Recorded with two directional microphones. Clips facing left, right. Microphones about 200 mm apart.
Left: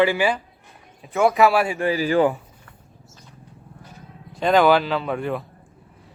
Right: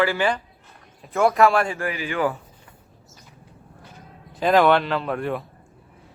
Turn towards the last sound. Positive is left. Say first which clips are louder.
# left 1 dB
turn(degrees=0)  # may be behind; listen again after turning